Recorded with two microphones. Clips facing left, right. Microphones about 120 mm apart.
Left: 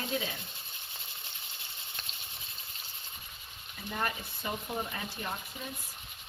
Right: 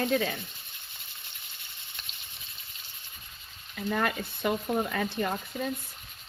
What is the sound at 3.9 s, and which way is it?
Speech, 85° right.